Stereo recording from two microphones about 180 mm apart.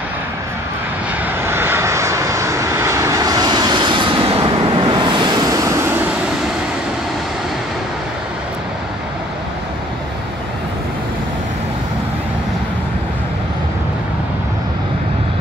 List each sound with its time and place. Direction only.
1.4 s vehicle: 15° right (ahead or behind)